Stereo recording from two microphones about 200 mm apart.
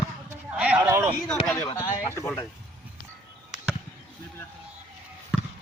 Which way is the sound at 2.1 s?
15° left (ahead or behind).